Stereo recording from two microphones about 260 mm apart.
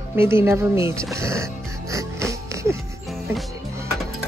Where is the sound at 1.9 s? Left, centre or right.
Centre.